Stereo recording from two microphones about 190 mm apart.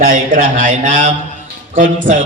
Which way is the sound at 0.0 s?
45° right (ahead or behind).